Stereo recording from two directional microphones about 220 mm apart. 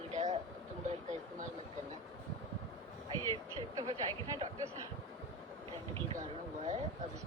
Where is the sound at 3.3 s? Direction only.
15° right (ahead or behind).